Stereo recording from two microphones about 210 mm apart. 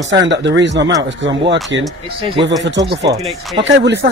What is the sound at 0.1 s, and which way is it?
Speech, 60° right (ahead or behind).